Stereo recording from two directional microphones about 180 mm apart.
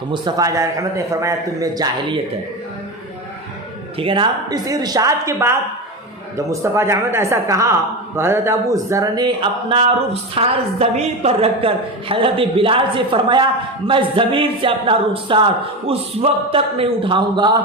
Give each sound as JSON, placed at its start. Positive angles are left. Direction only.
{"t": 0.1, "sound": "speech", "side_deg": -20}
{"t": 3.9, "sound": "speech", "side_deg": -30}